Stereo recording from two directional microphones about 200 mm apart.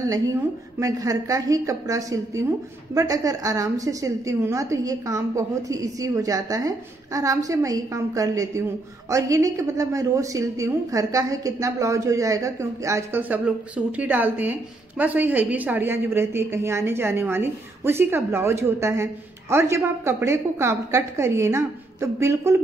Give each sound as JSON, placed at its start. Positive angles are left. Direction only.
{"t": 0.0, "sound": "a woman's voice", "side_deg": -15}